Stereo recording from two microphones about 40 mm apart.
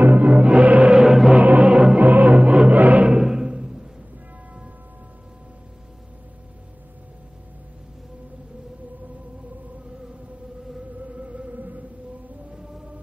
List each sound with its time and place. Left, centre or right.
0.0 s music: right
0.3 s music: right
0.9 s choir: centre
1.3 s music: right
1.7 s music: right
2.0 s music: right
2.3 s music: right
2.7 s music: right
3.1 s music: centre
11.1 s music: right
11.5 s music: right